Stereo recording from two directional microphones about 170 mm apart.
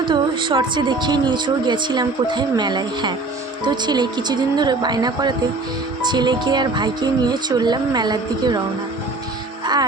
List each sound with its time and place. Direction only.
0.0 s speech: 30° right (ahead or behind)